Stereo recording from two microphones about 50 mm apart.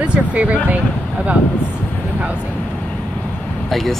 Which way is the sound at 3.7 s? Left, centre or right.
Centre.